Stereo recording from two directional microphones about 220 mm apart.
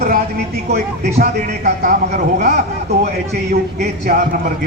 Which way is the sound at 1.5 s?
35° right (ahead or behind).